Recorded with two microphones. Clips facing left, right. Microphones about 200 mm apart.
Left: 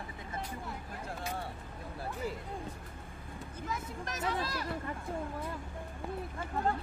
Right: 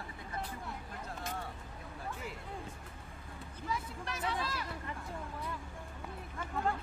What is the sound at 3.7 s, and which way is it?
Vehicle, 45° left (ahead or behind).